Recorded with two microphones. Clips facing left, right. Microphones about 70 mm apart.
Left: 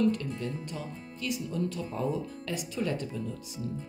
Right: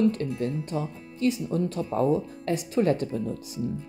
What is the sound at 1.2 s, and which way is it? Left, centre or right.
Speech, right.